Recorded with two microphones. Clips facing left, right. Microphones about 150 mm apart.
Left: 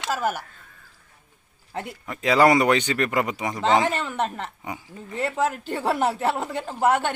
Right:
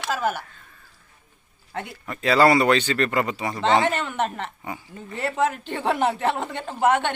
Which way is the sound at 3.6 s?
Centre (ahead or behind).